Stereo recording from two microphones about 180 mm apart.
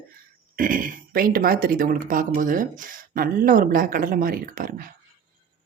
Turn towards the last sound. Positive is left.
turn(degrees=-50)  # may be behind; listen again after turning